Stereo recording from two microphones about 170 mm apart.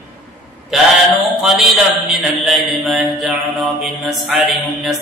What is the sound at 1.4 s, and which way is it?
Mantra, centre (ahead or behind).